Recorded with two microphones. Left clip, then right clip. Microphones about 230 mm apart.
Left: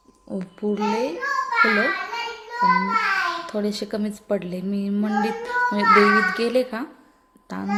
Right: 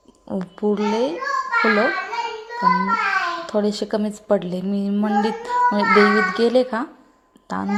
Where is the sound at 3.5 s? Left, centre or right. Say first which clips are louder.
Right 5 dB; centre.